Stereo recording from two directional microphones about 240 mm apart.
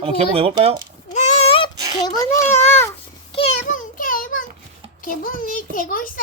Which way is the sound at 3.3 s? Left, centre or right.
Left.